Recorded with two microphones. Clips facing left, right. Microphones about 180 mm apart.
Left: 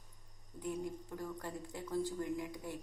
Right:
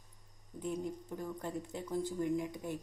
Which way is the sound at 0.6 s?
20° right (ahead or behind).